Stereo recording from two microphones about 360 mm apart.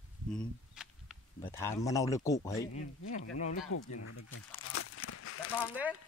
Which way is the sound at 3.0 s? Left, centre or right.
Left.